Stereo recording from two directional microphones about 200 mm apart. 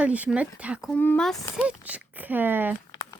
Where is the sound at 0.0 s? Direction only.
5° right (ahead or behind).